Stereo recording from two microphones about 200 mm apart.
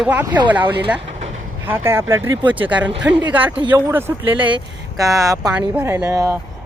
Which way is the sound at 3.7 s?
10° right (ahead or behind).